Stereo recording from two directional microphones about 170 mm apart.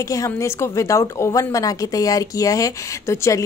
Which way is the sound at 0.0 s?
20° left (ahead or behind).